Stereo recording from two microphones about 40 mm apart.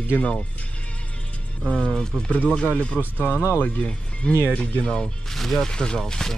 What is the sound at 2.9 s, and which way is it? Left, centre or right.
Speech, centre.